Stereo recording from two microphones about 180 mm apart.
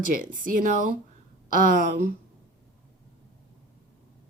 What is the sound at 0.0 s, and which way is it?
Speech, 50° right (ahead or behind).